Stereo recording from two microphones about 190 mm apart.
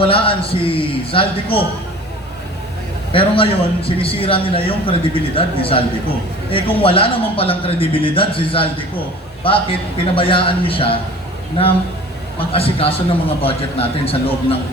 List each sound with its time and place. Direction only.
0.0 s a man's voice: 30° left (ahead or behind)
3.1 s a man's voice: 30° left (ahead or behind)
12.4 s a man's voice: 30° left (ahead or behind)